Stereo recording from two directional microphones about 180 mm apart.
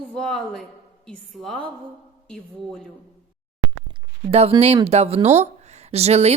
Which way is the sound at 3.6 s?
5° right (ahead or behind).